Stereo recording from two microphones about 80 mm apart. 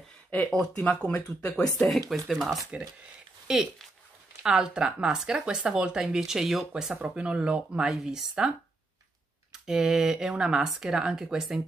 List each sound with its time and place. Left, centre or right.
0.3 s speech: centre
1.6 s speech: centre
4.4 s speech: centre